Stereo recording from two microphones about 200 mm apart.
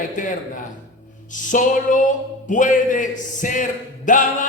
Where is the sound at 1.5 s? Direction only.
40° left (ahead or behind).